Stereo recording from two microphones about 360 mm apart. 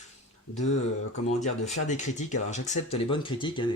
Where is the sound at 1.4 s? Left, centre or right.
Centre.